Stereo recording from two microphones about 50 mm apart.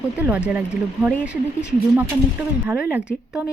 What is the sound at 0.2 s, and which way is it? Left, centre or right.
Speech, right.